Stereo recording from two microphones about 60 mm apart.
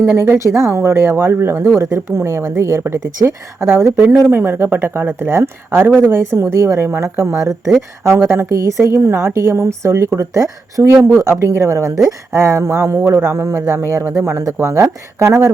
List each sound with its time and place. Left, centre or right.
0.3 s speech: right
8.8 s speech: right